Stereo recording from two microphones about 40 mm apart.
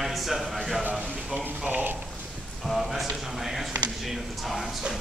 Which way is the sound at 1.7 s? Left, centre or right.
Right.